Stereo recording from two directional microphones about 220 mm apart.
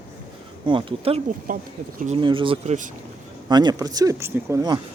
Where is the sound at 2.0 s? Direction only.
30° right (ahead or behind).